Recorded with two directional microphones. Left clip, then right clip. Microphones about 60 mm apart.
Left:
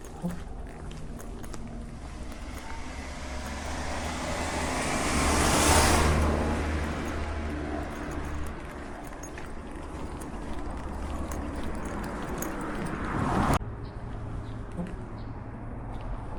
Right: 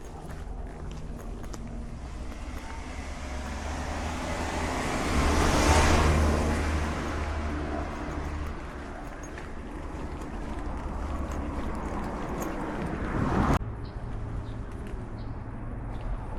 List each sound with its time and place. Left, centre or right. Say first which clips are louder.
3.4 s vehicle: left 1 dB; left
6.5 s a sound: right 1 dB; right
7.9 s vehicle: right 1 dB; centre
11.8 s vehicle: right 1 dB; left